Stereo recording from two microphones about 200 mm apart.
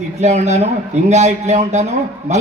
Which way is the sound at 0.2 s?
35° right (ahead or behind).